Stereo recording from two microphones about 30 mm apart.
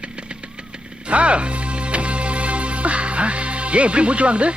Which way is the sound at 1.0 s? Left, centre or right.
Right.